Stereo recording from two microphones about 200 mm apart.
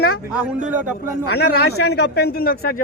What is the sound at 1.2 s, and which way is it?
Speech, 55° left (ahead or behind).